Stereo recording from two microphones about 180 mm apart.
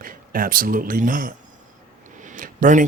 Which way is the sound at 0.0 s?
50° right (ahead or behind).